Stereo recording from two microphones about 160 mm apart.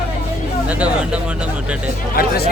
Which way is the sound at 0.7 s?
10° right (ahead or behind).